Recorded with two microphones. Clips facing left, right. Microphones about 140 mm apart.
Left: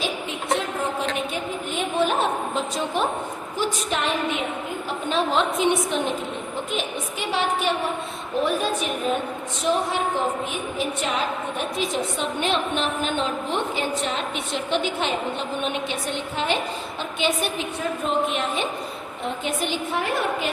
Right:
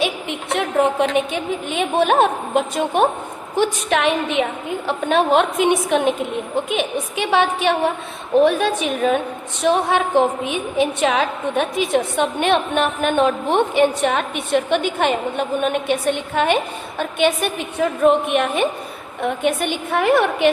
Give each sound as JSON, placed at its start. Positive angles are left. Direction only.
{"t": 0.0, "sound": "a woman's voice", "side_deg": -65}
{"t": 3.5, "sound": "a woman's voice", "side_deg": -70}
{"t": 4.9, "sound": "a woman's voice", "side_deg": -60}